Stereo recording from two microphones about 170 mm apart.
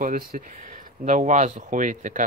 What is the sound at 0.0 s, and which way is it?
Speech, 55° right (ahead or behind).